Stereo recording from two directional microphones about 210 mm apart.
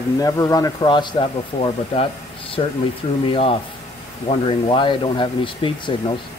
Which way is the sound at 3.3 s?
25° left (ahead or behind).